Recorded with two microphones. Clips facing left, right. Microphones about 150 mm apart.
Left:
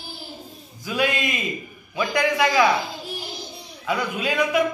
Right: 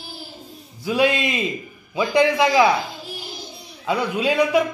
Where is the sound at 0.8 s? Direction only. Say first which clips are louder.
Right 5 dB; 30° right (ahead or behind).